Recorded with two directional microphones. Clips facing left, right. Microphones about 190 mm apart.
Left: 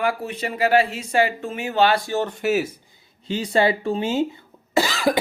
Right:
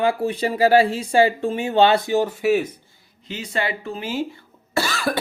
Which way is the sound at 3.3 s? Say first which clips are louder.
Left 6 dB; 30° left (ahead or behind).